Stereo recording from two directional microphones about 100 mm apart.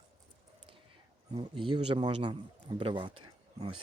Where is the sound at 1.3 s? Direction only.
55° right (ahead or behind).